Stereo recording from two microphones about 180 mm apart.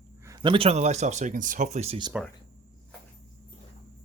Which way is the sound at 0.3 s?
25° right (ahead or behind).